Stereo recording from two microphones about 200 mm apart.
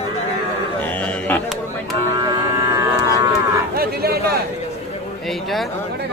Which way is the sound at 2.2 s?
20° right (ahead or behind).